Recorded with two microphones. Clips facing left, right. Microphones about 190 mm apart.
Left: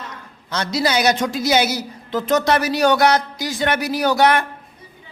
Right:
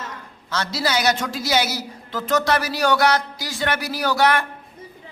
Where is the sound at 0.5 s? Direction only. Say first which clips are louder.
Left 3 dB; 20° left (ahead or behind).